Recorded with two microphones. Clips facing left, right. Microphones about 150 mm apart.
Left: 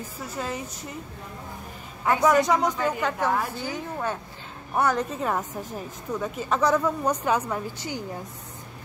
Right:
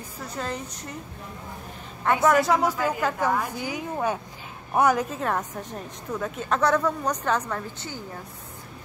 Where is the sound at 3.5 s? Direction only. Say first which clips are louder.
Right 1 dB; 10° right (ahead or behind); by 8.0 s 15° left (ahead or behind).